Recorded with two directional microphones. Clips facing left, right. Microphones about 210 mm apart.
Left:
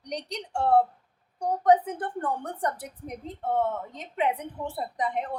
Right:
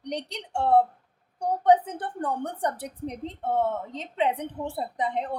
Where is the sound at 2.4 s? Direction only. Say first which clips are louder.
Right 2 dB; 30° right (ahead or behind).